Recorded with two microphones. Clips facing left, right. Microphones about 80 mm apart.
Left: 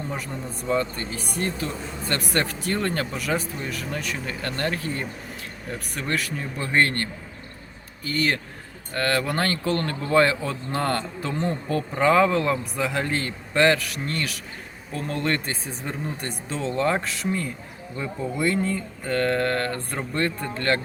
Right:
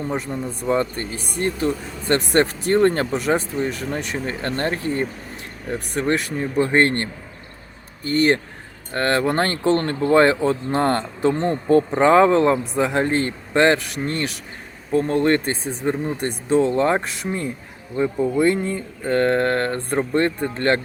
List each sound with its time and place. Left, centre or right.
0.1 s speech: right
2.3 s speech: right